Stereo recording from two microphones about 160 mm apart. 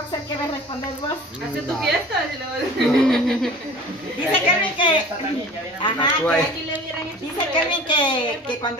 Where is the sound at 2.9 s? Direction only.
5° left (ahead or behind).